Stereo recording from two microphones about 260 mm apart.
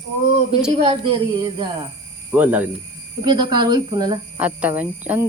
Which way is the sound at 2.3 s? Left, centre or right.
Centre.